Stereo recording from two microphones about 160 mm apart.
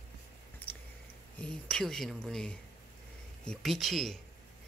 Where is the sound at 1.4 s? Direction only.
5° left (ahead or behind).